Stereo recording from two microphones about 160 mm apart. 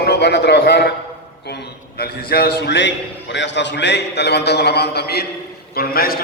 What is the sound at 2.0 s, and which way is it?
A man's voice, 75° left (ahead or behind).